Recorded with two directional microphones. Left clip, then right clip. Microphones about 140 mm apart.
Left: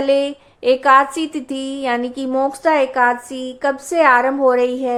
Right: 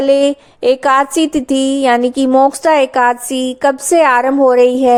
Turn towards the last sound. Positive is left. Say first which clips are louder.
# right 7 dB
turn(degrees=-50)  # may be behind; listen again after turning